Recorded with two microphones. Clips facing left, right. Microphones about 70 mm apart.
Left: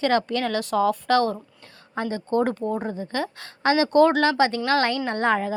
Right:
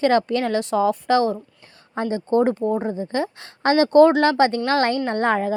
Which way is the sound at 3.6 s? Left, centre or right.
Right.